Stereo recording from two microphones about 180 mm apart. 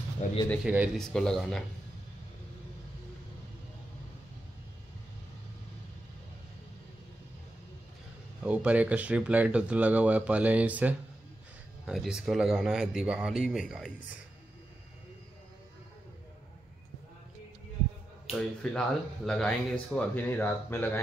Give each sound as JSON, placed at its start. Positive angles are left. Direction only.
{"t": 0.2, "sound": "speech", "side_deg": 45}
{"t": 0.7, "sound": "speech", "side_deg": -10}
{"t": 1.0, "sound": "speech", "side_deg": 5}
{"t": 8.5, "sound": "speech", "side_deg": -10}
{"t": 18.3, "sound": "speech", "side_deg": 5}